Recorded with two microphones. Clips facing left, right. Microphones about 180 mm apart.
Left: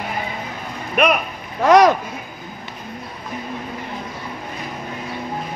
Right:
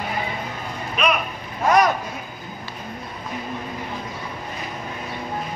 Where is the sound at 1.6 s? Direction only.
85° left.